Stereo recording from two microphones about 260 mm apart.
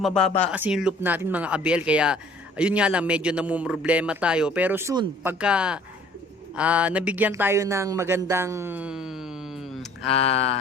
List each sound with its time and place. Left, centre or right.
0.0 s a man's voice: centre
10.2 s speech: left